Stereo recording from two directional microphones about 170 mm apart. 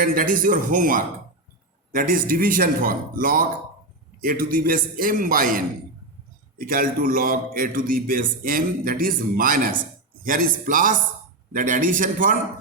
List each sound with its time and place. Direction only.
0.0 s a man's voice: 55° right (ahead or behind)